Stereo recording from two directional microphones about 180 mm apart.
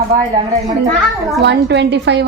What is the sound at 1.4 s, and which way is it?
Speech, 70° right (ahead or behind).